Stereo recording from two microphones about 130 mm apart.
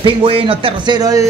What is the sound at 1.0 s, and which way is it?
Speech, 30° right (ahead or behind).